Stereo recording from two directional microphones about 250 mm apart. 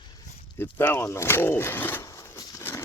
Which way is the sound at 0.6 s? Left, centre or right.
Centre.